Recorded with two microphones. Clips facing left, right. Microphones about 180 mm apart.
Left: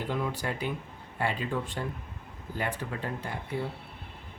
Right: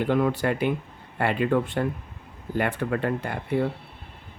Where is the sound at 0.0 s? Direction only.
65° right (ahead or behind).